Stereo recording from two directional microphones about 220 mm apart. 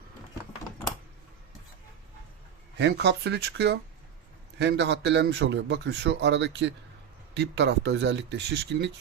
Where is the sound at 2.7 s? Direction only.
50° right (ahead or behind).